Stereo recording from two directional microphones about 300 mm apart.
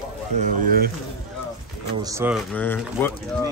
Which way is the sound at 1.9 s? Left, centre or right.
Centre.